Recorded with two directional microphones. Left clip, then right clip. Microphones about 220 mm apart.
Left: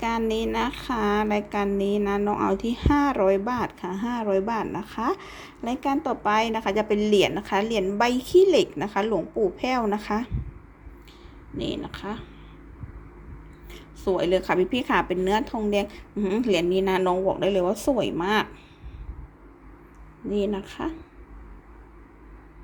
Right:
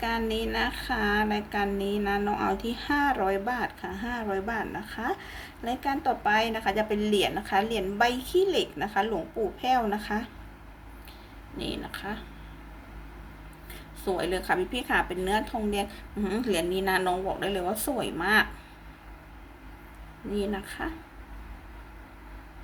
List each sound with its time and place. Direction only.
0.0 s speech: 20° left (ahead or behind)
11.5 s speech: 20° left (ahead or behind)
13.7 s speech: 15° left (ahead or behind)
20.3 s speech: 15° left (ahead or behind)